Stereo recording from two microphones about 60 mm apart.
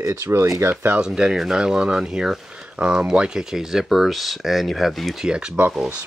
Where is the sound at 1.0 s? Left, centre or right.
Centre.